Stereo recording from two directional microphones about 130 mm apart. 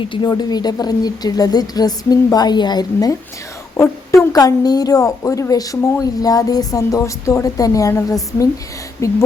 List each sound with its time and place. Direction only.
0.0 s a woman's voice: 35° left (ahead or behind)